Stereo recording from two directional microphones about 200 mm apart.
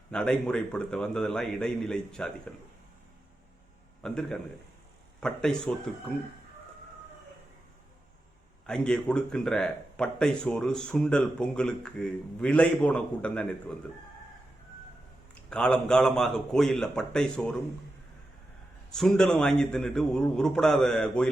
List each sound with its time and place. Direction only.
0.1 s speech: 5° left (ahead or behind)
4.0 s speech: 5° left (ahead or behind)
8.6 s speech: 5° left (ahead or behind)
15.4 s speech: 5° left (ahead or behind)
18.9 s speech: 5° left (ahead or behind)